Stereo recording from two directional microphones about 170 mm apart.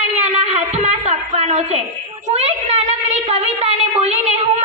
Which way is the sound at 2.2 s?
40° right (ahead or behind).